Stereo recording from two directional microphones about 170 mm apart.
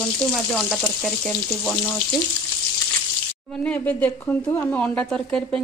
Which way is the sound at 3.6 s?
10° left (ahead or behind).